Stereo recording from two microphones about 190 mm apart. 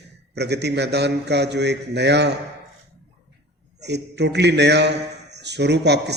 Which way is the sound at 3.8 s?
65° right (ahead or behind).